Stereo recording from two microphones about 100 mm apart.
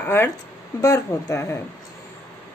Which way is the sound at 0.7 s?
35° left (ahead or behind).